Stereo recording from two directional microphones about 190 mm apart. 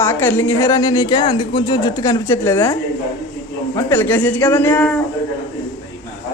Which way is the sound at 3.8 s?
10° left (ahead or behind).